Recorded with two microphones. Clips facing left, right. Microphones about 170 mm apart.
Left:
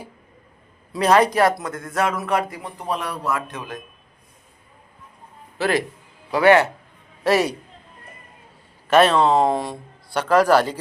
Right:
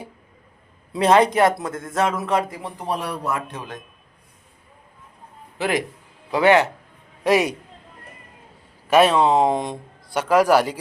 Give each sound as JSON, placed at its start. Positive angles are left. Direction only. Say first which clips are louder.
{"t": 0.9, "sound": "speech", "louder": "right 1 dB", "side_deg": -25}
{"t": 2.6, "sound": "speech", "louder": "right 1 dB", "side_deg": -5}
{"t": 2.9, "sound": "speech", "louder": "even", "side_deg": -30}
{"t": 5.5, "sound": "a man's voice", "louder": "left 2 dB", "side_deg": -15}
{"t": 8.9, "sound": "a man's voice", "louder": "even", "side_deg": -10}